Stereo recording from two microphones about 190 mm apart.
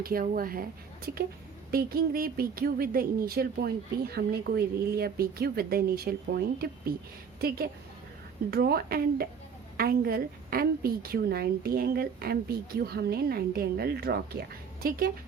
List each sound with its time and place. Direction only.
0.0 s a woman's voice: 50° right (ahead or behind)